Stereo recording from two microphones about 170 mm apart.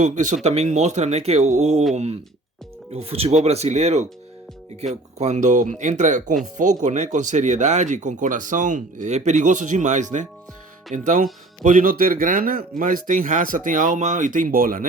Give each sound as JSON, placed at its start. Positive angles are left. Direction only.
{"t": 0.0, "sound": "speech", "side_deg": -45}
{"t": 2.9, "sound": "speech", "side_deg": -35}
{"t": 5.1, "sound": "speech", "side_deg": -40}